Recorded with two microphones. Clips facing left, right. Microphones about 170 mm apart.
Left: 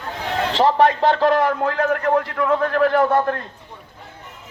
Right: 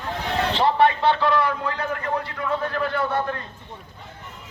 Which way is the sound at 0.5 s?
40° left (ahead or behind).